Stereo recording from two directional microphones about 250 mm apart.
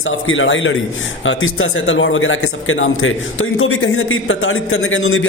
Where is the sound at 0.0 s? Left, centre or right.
Left.